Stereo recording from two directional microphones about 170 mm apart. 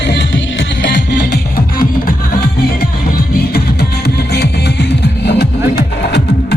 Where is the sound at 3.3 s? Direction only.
70° left (ahead or behind).